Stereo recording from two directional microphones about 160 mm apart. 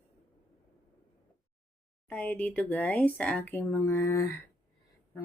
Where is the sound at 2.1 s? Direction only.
10° left (ahead or behind).